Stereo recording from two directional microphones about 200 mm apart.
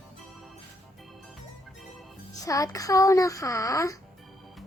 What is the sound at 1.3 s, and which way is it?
Music, centre (ahead or behind).